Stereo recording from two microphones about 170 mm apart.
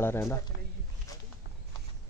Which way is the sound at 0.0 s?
15° left (ahead or behind).